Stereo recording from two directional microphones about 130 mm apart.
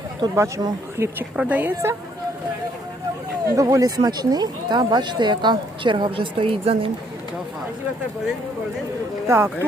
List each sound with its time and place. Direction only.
0.3 s speech: 25° right (ahead or behind)
1.4 s a woman's voice: 10° right (ahead or behind)
3.5 s speech: 25° right (ahead or behind); by 6.9 s 45° right (ahead or behind)
9.2 s speech: 20° right (ahead or behind)